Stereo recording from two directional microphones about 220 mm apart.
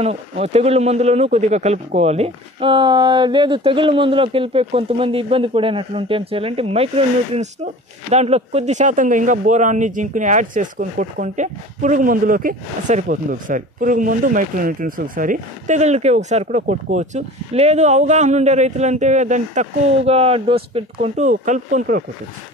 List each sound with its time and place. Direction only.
0.0 s speech: 30° right (ahead or behind)